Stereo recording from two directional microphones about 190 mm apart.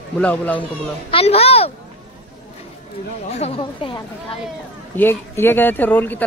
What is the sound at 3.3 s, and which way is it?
Speech, 35° left (ahead or behind).